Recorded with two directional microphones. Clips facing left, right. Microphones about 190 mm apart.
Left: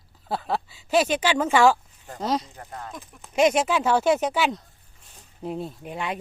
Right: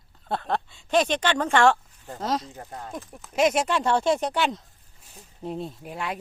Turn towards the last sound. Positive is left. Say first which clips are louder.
# left 2 dB
turn(degrees=0)  # may be behind; listen again after turning